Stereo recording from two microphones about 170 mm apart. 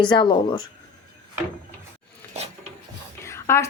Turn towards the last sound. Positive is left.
turn(degrees=15)  # may be behind; listen again after turning